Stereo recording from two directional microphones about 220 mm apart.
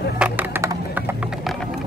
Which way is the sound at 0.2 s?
10° right (ahead or behind).